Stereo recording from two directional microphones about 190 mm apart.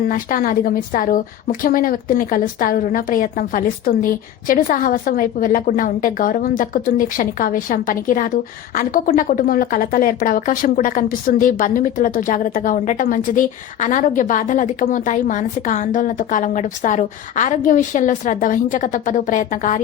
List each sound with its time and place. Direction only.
0.1 s a woman's voice: 45° left (ahead or behind)